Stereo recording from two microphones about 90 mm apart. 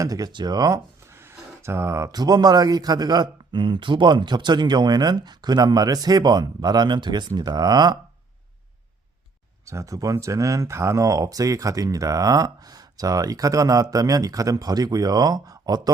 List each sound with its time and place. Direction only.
0.0 s speech: 45° right (ahead or behind)
1.1 s speech: 30° right (ahead or behind); by 7.9 s 50° right (ahead or behind)
9.6 s speech: 35° right (ahead or behind)